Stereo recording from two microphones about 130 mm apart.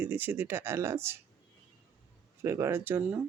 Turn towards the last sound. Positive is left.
turn(degrees=-15)  # may be behind; listen again after turning